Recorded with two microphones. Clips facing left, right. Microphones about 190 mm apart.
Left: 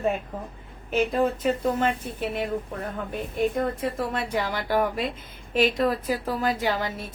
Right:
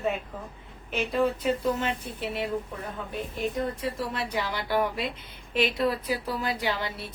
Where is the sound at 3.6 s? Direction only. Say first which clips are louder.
Left 3 dB; 50° left (ahead or behind).